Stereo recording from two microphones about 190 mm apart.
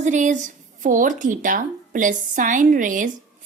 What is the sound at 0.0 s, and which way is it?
A woman's voice, 40° right (ahead or behind).